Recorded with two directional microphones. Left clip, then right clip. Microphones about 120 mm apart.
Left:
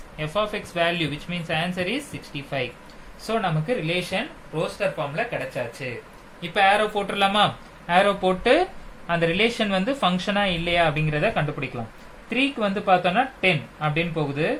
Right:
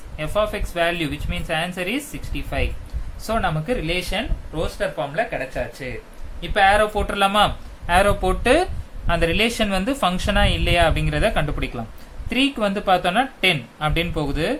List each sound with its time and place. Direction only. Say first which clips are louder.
0.2 s speech: right 3 dB; 15° right (ahead or behind)
6.4 s speech: right 3 dB; 15° right (ahead or behind)